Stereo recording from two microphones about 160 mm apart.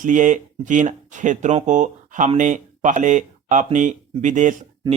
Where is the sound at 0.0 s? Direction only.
55° right (ahead or behind).